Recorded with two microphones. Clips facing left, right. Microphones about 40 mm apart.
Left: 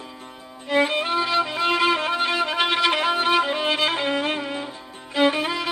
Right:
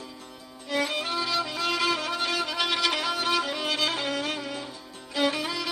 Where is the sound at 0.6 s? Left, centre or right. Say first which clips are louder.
Left 7 dB; left.